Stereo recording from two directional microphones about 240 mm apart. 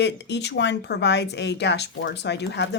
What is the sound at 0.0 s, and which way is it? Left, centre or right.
Speech, left.